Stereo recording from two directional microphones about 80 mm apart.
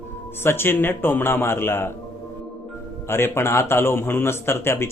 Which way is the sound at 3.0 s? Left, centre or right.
Left.